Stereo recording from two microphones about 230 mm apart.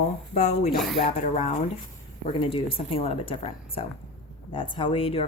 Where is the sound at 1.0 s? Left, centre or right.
Left.